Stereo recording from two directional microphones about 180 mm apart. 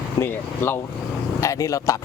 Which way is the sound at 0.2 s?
10° left (ahead or behind).